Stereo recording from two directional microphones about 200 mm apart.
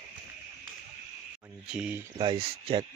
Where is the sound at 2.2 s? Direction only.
25° right (ahead or behind).